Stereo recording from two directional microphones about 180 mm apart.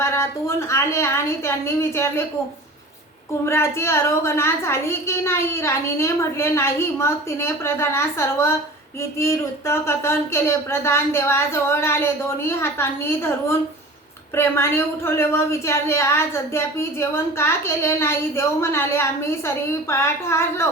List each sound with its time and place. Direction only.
0.0 s a woman's voice: 15° left (ahead or behind)
3.4 s a woman's voice: 15° left (ahead or behind)